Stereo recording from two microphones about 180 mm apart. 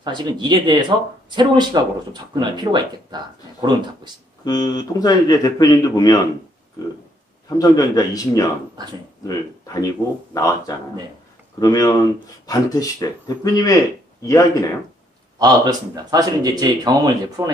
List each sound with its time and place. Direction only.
0.0 s speech: 25° right (ahead or behind)
4.5 s a man's voice: 20° left (ahead or behind)
7.4 s a man's voice: 20° left (ahead or behind)
10.3 s a man's voice: 20° left (ahead or behind)
11.6 s a man's voice: 20° left (ahead or behind)
15.3 s speech: 20° right (ahead or behind)